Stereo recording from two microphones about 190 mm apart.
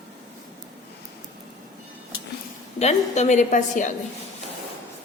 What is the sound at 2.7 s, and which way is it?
A woman's voice, 35° left (ahead or behind).